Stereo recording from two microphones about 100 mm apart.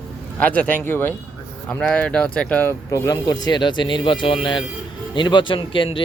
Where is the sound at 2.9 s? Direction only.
35° left (ahead or behind); by 6.0 s 60° left (ahead or behind).